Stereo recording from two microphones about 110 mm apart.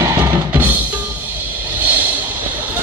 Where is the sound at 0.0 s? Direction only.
25° right (ahead or behind).